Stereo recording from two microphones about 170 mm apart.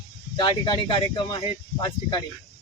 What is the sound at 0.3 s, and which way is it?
Speech, 25° left (ahead or behind).